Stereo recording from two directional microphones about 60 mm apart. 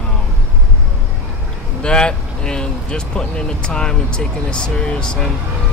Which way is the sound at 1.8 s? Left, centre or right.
Centre.